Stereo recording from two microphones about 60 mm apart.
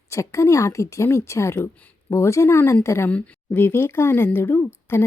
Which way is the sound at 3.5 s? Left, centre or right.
Left.